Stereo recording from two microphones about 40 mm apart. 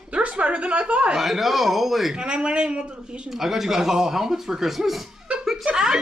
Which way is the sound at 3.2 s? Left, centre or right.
Centre.